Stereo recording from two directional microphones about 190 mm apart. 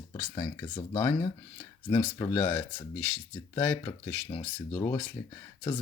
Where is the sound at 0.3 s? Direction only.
15° left (ahead or behind).